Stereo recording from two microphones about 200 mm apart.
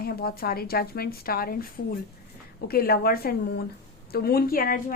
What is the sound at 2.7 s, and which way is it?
Speech, 50° left (ahead or behind).